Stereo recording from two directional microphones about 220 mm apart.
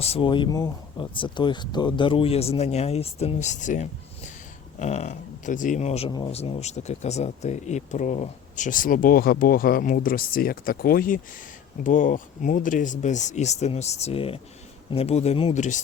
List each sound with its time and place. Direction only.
0.0 s speech: 25° left (ahead or behind)